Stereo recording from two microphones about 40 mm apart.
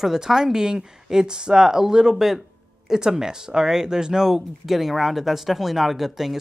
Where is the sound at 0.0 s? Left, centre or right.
Centre.